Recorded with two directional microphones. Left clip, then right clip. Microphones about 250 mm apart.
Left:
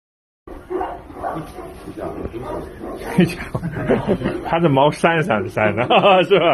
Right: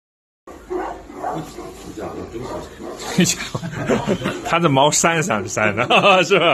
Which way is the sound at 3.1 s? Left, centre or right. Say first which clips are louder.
Even; centre.